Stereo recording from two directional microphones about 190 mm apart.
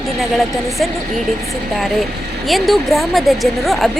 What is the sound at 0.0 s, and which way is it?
Speech, centre (ahead or behind).